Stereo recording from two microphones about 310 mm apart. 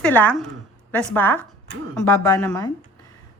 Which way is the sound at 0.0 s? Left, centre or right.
Centre.